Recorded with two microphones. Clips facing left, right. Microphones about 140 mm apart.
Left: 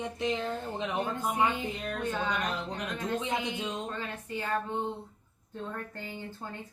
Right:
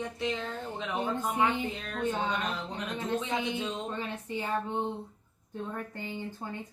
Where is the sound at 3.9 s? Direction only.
15° right (ahead or behind).